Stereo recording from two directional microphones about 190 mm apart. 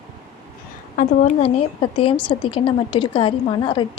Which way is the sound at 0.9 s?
40° left (ahead or behind).